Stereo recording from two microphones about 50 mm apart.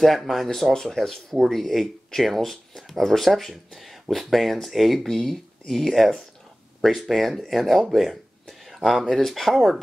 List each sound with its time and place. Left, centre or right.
0.0 s speech: centre